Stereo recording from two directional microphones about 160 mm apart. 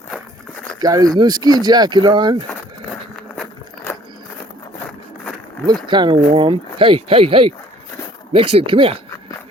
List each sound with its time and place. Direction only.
0.8 s speech: 25° right (ahead or behind)
5.8 s speech: 30° right (ahead or behind)